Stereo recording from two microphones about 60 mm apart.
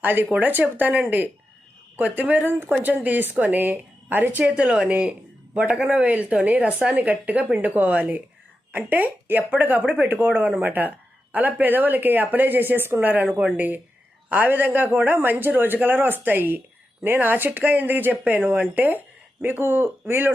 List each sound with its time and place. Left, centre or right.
0.0 s speech: right